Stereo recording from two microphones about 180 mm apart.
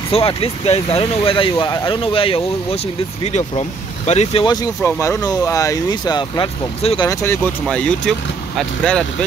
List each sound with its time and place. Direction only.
0.1 s speech: 30° left (ahead or behind)
4.8 s speech: 15° left (ahead or behind)
7.1 s speech: 15° left (ahead or behind)